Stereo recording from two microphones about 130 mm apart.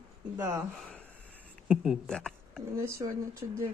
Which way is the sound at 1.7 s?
5° right (ahead or behind).